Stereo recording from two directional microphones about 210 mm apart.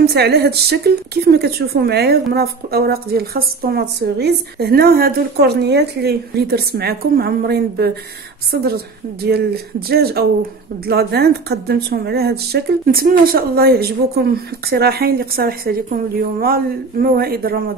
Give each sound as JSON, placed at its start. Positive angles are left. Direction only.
{"t": 0.0, "sound": "a woman's voice", "side_deg": -50}